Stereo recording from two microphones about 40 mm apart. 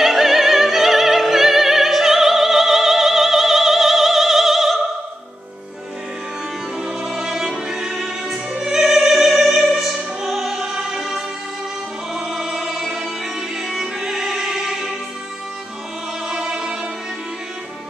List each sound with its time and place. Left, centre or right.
0.0 s opera: centre
7.0 s music: centre
16.3 s music: centre